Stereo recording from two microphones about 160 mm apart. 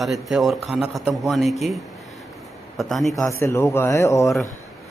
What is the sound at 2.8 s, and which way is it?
Speech, centre (ahead or behind).